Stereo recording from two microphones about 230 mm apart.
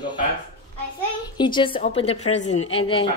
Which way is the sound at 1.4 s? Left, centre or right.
Centre.